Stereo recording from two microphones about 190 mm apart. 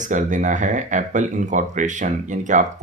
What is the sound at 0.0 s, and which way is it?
Speech, 40° right (ahead or behind).